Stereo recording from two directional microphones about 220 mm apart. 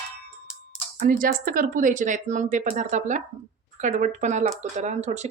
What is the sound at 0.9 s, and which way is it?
Speech, 40° right (ahead or behind).